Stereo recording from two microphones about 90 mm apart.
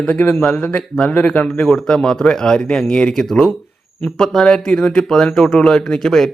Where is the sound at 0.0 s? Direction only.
15° left (ahead or behind).